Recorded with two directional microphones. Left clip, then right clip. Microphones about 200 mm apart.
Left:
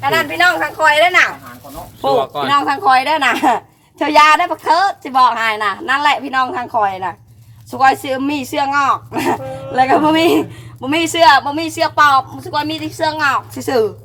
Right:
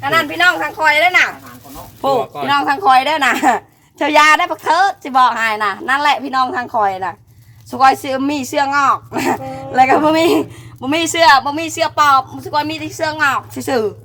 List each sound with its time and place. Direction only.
0.1 s speech: 15° right (ahead or behind)
2.0 s speech: 35° right (ahead or behind)